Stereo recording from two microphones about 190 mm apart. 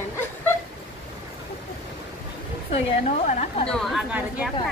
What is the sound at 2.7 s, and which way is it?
A woman's voice, 35° left (ahead or behind).